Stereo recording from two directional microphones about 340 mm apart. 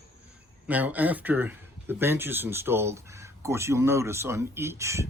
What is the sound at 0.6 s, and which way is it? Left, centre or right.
Speech, centre.